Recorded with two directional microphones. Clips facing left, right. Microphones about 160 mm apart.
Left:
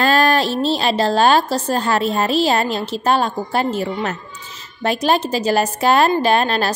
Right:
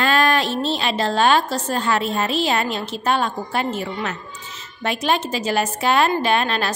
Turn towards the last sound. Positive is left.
turn(degrees=40)  # may be behind; listen again after turning